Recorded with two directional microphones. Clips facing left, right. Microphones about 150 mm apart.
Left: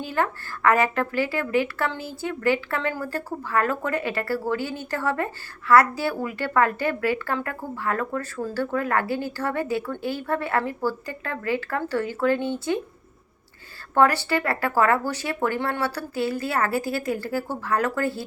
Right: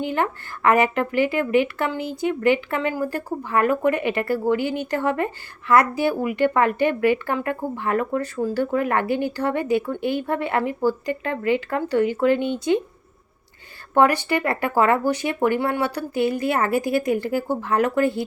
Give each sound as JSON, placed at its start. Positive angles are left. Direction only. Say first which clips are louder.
{"t": 0.0, "sound": "a woman's voice", "louder": "right 2 dB", "side_deg": -20}
{"t": 13.9, "sound": "a woman's voice", "louder": "right 2 dB", "side_deg": -15}